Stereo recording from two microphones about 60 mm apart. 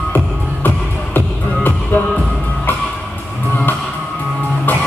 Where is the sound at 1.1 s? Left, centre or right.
Left.